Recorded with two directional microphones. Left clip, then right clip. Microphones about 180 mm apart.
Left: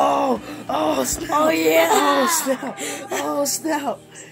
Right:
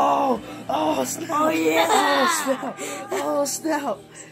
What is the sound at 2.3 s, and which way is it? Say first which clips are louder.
Speech: left 1 dB; 35° left (ahead or behind).